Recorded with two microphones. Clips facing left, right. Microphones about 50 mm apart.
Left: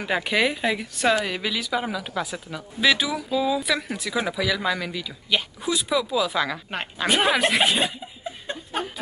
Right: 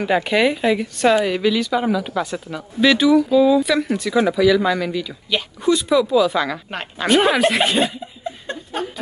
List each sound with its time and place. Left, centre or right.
0.0 s speech: centre